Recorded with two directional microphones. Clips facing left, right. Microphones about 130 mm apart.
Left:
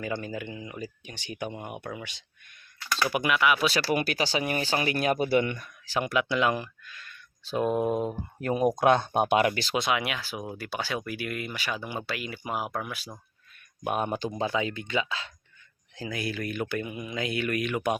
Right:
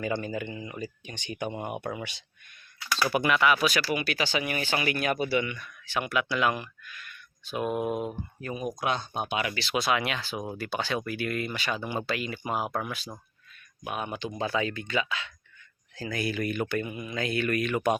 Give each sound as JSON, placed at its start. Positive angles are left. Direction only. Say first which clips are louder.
{"t": 0.0, "sound": "speech", "louder": "right 2 dB", "side_deg": 5}
{"t": 1.5, "sound": "speech", "louder": "right 6 dB", "side_deg": -15}
{"t": 3.1, "sound": "speech", "louder": "right 1 dB", "side_deg": 10}
{"t": 3.6, "sound": "speech", "louder": "even", "side_deg": 30}
{"t": 3.8, "sound": "speech", "louder": "left 2 dB", "side_deg": 45}
{"t": 8.4, "sound": "speech", "louder": "left 10 dB", "side_deg": 70}
{"t": 8.8, "sound": "speech", "louder": "left 7 dB", "side_deg": 55}
{"t": 9.7, "sound": "speech", "louder": "even", "side_deg": 20}
{"t": 13.8, "sound": "speech", "louder": "left 5 dB", "side_deg": 45}
{"t": 14.3, "sound": "speech", "louder": "right 3 dB", "side_deg": 20}
{"t": 16.1, "sound": "speech", "louder": "right 2 dB", "side_deg": 0}